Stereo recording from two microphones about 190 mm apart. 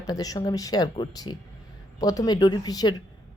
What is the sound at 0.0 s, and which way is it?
Speech, 20° left (ahead or behind).